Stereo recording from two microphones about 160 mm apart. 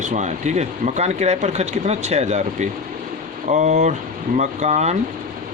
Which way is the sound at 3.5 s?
50° right (ahead or behind).